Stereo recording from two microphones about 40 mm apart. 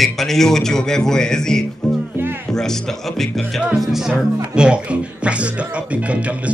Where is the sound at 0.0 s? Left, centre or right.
Centre.